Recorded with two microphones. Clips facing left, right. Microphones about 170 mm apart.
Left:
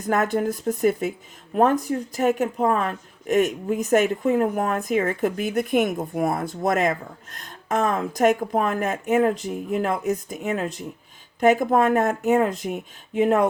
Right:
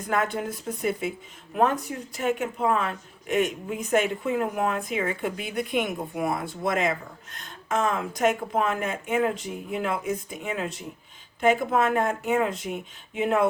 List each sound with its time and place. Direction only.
0.1 s speech: 45° left (ahead or behind)